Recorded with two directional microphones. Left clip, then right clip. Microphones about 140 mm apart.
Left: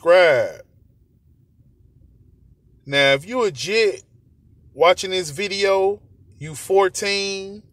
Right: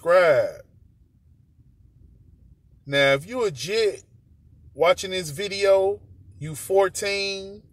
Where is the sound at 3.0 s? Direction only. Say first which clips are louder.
Left 3 dB; 40° left (ahead or behind).